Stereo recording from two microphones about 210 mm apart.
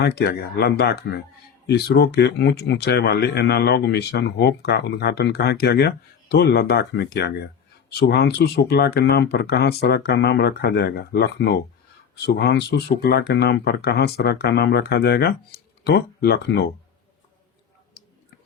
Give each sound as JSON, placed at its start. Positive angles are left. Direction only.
{"t": 0.0, "sound": "speech", "side_deg": 50}